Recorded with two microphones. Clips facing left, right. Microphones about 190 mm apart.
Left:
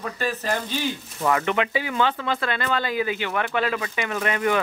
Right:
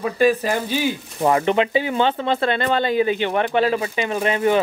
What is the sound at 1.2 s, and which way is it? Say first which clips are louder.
Speech: right 5 dB; 30° right (ahead or behind).